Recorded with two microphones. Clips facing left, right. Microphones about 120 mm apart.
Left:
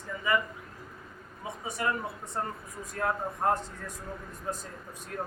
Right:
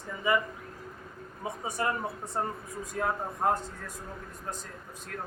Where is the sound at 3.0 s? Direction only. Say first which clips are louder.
Even; 5° right (ahead or behind).